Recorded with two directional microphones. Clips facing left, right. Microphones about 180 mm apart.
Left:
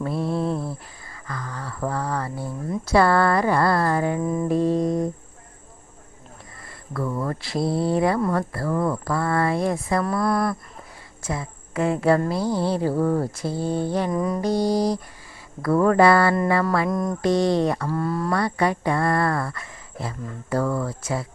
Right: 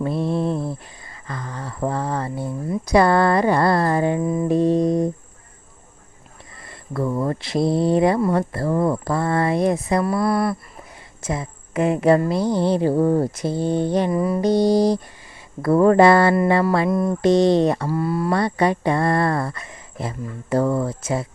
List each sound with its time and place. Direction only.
0.0 s a sound: 20° right (ahead or behind)
2.8 s speech: 20° right (ahead or behind)
4.2 s mantra: 10° right (ahead or behind)
4.4 s mantra: 20° right (ahead or behind)
6.7 s a sound: 20° right (ahead or behind)
8.3 s speech: 25° right (ahead or behind)
10.0 s speech: 5° right (ahead or behind)
11.2 s speech: 20° right (ahead or behind)
14.1 s speech: 5° right (ahead or behind)
14.4 s speech: 20° right (ahead or behind)
16.9 s speech: 10° right (ahead or behind)
17.2 s speech: 20° right (ahead or behind)
17.8 s speech: 10° right (ahead or behind)
18.3 s speech: 25° right (ahead or behind)